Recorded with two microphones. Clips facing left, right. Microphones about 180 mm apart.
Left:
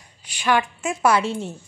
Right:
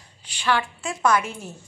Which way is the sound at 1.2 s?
30° left (ahead or behind).